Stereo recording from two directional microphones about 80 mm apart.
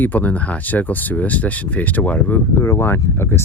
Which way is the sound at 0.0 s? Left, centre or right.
Left.